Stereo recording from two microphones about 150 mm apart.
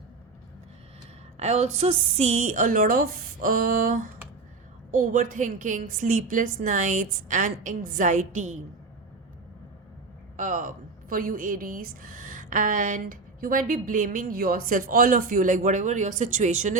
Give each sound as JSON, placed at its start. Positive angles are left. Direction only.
{"t": 1.4, "sound": "a woman's voice", "side_deg": -50}
{"t": 10.3, "sound": "a woman's voice", "side_deg": -60}